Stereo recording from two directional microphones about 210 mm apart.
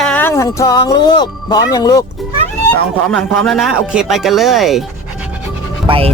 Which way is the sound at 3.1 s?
Centre (ahead or behind).